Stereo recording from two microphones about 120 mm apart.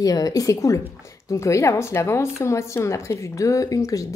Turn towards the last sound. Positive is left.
turn(degrees=30)  # may be behind; listen again after turning